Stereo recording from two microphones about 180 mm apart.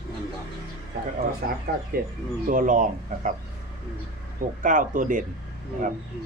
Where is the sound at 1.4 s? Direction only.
60° right (ahead or behind).